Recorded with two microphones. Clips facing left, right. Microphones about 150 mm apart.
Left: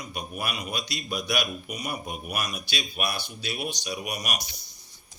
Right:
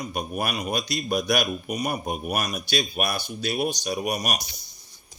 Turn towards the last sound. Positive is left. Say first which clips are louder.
# right 6 dB
turn(degrees=-40)  # may be behind; listen again after turning